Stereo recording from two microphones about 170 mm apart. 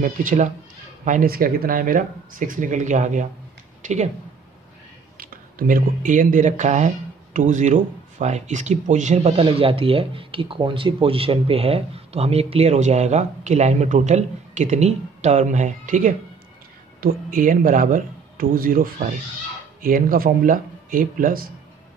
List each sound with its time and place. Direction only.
0.0 s speech: 50° right (ahead or behind)
5.1 s speech: 60° right (ahead or behind)